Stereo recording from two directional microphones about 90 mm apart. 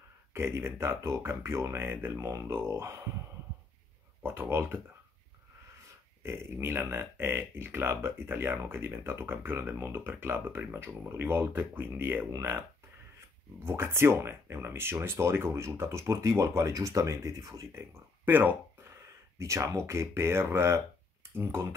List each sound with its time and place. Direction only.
0.3 s speech: 30° right (ahead or behind)
4.2 s speech: 25° right (ahead or behind)
6.2 s speech: 30° right (ahead or behind)
13.6 s speech: 25° right (ahead or behind)
17.7 s speech: 25° right (ahead or behind)
18.9 s a sound: 35° right (ahead or behind)
19.9 s speech: 30° right (ahead or behind)